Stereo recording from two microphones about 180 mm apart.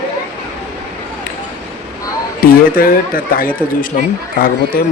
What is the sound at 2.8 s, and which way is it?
A man's voice, 50° left (ahead or behind).